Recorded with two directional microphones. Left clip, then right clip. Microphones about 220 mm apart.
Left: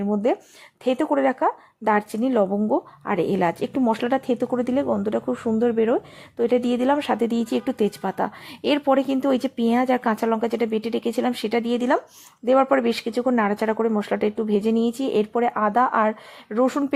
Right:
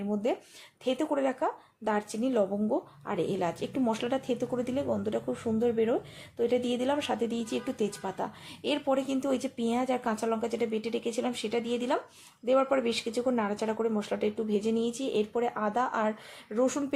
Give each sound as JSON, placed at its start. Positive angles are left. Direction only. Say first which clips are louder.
{"t": 0.0, "sound": "speech", "louder": "left 8 dB", "side_deg": 25}